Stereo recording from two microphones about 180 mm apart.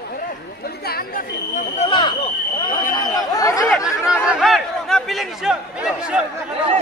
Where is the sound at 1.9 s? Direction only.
25° left (ahead or behind).